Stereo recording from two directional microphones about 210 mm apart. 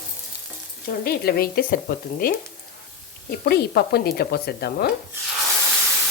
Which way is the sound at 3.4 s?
50° left (ahead or behind).